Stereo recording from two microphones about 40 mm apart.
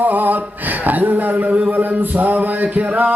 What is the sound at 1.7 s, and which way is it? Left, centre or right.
Music, right.